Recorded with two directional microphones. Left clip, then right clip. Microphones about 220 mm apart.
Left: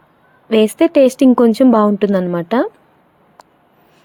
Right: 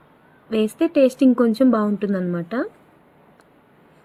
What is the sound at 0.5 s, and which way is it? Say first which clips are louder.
A woman's voice: left 8 dB; 35° left (ahead or behind).